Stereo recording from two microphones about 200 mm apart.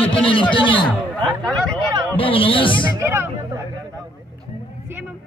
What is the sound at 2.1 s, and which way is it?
Speech, 25° left (ahead or behind).